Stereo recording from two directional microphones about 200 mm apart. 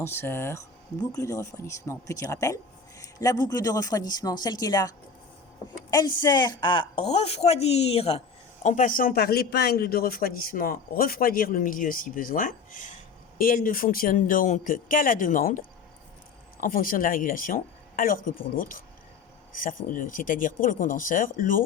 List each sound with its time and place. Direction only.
0.0 s speech: 10° left (ahead or behind)
3.0 s a sound: 15° left (ahead or behind)
3.5 s a woman's voice: 15° left (ahead or behind); by 21.6 s 45° left (ahead or behind)